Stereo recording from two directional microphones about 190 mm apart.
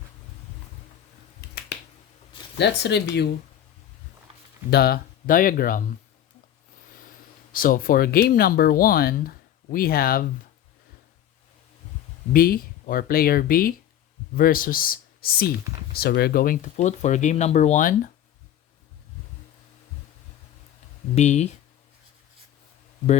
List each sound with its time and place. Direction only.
1.4 s finger snapping: 55° left (ahead or behind)
2.6 s speech: 65° left (ahead or behind)
4.7 s speech: 55° left (ahead or behind)
7.5 s speech: 50° left (ahead or behind)
12.3 s speech: 50° left (ahead or behind)
21.2 s speech: 35° left (ahead or behind)